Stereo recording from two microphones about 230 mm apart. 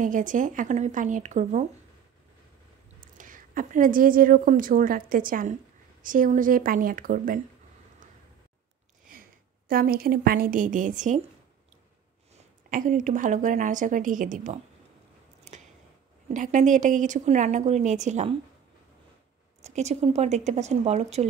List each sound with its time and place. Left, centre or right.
0.0 s a woman's voice: right
3.2 s a woman's voice: right
9.7 s a woman's voice: right
12.4 s a woman's voice: right
15.5 s a sound: right
16.3 s a woman's voice: right
19.6 s speech: right